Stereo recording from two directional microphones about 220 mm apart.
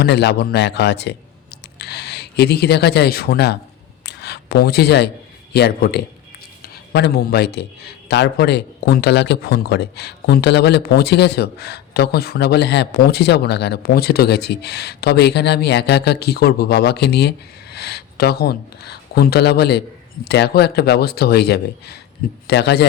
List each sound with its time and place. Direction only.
0.0 s speech: 50° left (ahead or behind)
4.0 s a sound: 50° left (ahead or behind)
5.5 s a man's voice: 45° left (ahead or behind)